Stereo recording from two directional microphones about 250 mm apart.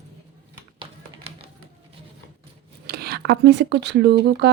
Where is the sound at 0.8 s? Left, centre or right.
Right.